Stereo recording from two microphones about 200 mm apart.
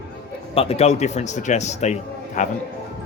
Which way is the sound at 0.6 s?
30° left (ahead or behind).